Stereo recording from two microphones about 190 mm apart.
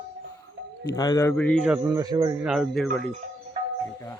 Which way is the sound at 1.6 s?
10° right (ahead or behind).